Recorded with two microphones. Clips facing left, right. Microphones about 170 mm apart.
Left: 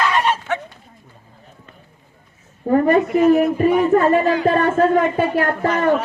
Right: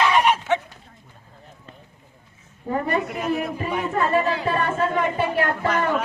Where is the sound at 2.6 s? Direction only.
45° left (ahead or behind).